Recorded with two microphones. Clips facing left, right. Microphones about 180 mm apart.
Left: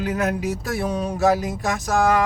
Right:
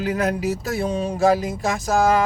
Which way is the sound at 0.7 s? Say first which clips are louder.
Left 1 dB; 25° right (ahead or behind).